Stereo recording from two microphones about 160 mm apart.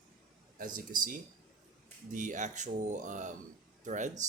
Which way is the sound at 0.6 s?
55° right (ahead or behind).